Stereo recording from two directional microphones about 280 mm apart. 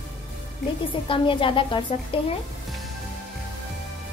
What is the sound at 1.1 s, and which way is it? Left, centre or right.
Speech, centre.